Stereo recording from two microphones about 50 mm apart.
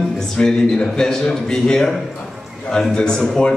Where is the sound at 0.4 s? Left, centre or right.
Centre.